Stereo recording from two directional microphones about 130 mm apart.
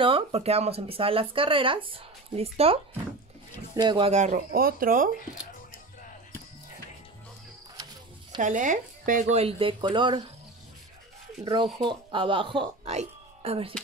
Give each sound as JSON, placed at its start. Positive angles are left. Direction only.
{"t": 0.0, "sound": "speech", "side_deg": -45}
{"t": 4.0, "sound": "speech", "side_deg": -65}
{"t": 7.7, "sound": "a sound", "side_deg": -30}
{"t": 8.4, "sound": "speech", "side_deg": -75}
{"t": 9.4, "sound": "speech", "side_deg": -45}
{"t": 11.4, "sound": "speech", "side_deg": -40}
{"t": 12.9, "sound": "speech", "side_deg": -50}